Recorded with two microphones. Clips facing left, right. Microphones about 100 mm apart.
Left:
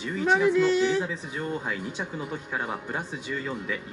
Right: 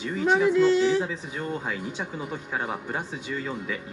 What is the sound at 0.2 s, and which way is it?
Speech, 15° right (ahead or behind).